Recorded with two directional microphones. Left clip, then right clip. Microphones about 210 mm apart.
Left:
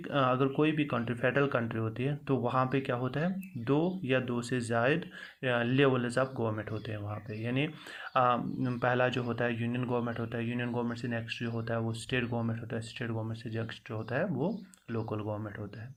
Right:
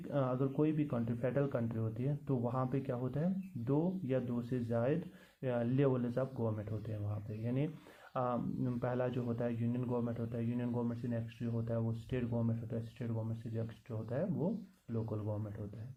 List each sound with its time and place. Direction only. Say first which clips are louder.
0.1 s speech: left 8 dB; 15° left (ahead or behind)
11.5 s speech: left 3 dB; 25° left (ahead or behind)
11.9 s speech: left 7 dB; 15° left (ahead or behind)